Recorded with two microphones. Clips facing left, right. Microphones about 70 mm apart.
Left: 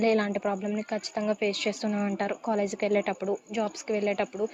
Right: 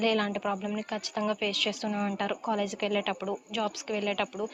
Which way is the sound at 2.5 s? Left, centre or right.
Left.